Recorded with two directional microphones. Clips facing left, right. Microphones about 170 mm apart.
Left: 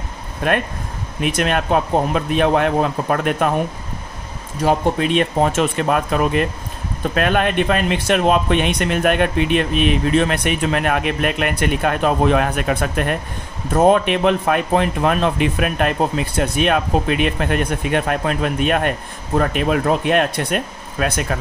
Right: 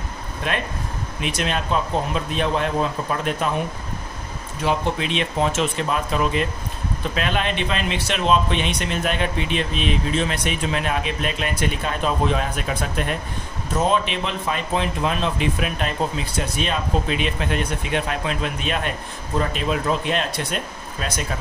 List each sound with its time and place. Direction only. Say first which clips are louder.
0.4 s speech: left 7 dB; 55° left (ahead or behind)
4.6 s speech: left 5 dB; 45° left (ahead or behind); by 21.4 s 60° left (ahead or behind)